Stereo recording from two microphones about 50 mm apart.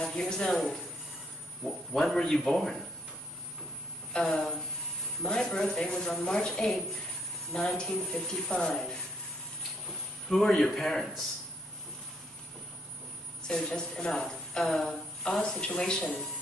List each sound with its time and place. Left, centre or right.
0.0 s speech: centre
1.6 s a woman's voice: centre
4.1 s a woman's voice: centre
10.3 s a man's voice: centre
13.5 s a woman's voice: centre